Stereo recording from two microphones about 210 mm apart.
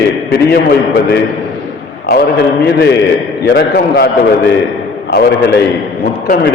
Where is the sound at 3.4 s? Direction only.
50° left (ahead or behind).